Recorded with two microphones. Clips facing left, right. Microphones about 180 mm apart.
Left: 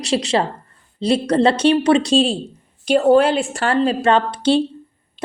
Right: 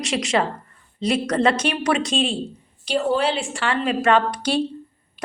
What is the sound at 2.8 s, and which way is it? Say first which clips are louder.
A woman's voice: left 8 dB; 50° left (ahead or behind).